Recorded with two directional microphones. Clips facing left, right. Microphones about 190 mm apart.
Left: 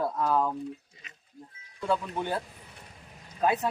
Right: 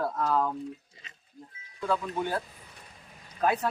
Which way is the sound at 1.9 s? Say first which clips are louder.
Even; 25° left (ahead or behind).